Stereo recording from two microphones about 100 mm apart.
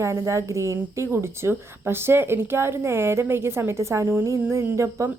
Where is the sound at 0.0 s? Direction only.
30° right (ahead or behind).